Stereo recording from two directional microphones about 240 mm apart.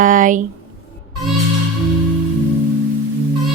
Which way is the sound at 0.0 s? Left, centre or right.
Right.